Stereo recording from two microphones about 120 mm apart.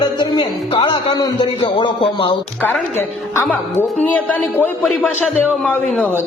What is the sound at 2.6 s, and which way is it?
A woman's voice, 15° left (ahead or behind).